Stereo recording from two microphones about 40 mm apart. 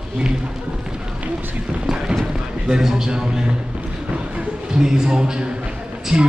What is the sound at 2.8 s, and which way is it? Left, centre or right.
Speech, centre.